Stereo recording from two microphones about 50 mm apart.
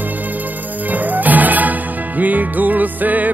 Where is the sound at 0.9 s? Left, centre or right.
Right.